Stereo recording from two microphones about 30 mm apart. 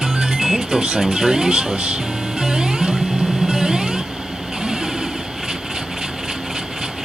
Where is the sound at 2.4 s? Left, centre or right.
Right.